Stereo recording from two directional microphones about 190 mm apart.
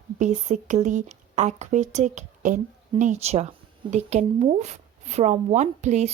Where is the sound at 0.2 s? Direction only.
40° right (ahead or behind).